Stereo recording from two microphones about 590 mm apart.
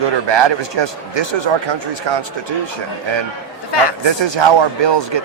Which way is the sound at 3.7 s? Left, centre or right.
Left.